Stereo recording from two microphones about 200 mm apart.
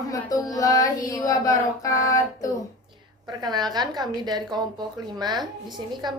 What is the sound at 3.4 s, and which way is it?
A woman's voice, 20° right (ahead or behind).